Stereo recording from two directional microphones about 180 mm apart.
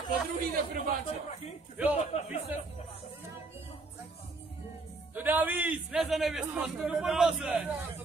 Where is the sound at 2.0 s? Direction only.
35° left (ahead or behind).